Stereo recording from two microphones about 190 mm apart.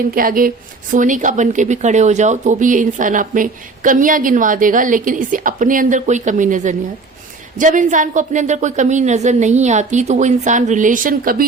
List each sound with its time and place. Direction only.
0.1 s a woman's voice: 50° right (ahead or behind)